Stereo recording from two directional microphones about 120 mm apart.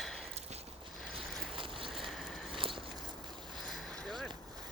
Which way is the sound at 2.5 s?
45° right (ahead or behind).